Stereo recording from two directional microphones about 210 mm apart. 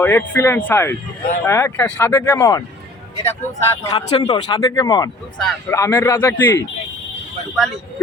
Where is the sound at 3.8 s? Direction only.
25° left (ahead or behind).